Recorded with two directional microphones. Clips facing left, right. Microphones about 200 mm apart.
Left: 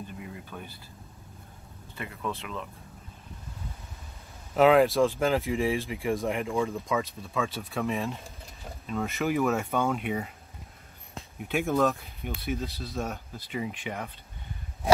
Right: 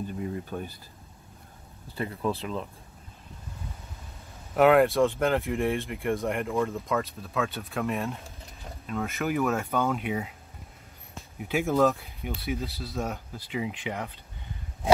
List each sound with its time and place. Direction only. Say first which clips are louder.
0.2 s a sound: right 8 dB; 40° right (ahead or behind)
2.0 s speech: right 5 dB; 35° right (ahead or behind)
4.6 s speech: even; centre (ahead or behind)
11.3 s speech: right 2 dB; centre (ahead or behind)
13.5 s speech: right 2 dB; 15° right (ahead or behind)